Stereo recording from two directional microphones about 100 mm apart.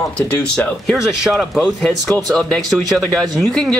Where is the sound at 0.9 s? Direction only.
Centre (ahead or behind).